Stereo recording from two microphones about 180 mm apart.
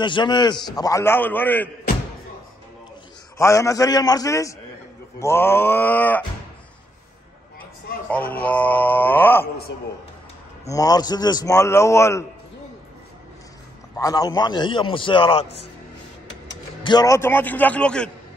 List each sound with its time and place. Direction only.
0.0 s a man's voice: 25° left (ahead or behind)
3.3 s a man's voice: 15° left (ahead or behind)
8.1 s a man's voice: 10° left (ahead or behind)
10.7 s a man's voice: 20° left (ahead or behind)
13.9 s a man's voice: 20° left (ahead or behind)
16.8 s a man's voice: 20° left (ahead or behind); by 18.1 s 5° left (ahead or behind)